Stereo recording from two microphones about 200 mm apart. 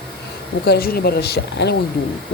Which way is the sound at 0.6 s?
50° left (ahead or behind).